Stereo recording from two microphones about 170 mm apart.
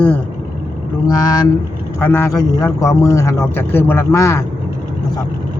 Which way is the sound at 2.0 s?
15° left (ahead or behind).